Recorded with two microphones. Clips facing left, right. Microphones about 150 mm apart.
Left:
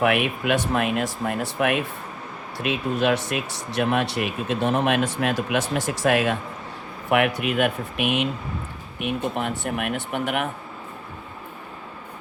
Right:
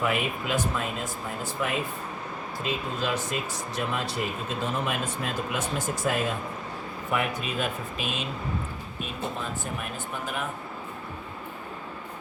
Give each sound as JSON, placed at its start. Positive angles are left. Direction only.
{"t": 0.0, "sound": "speech", "side_deg": 70}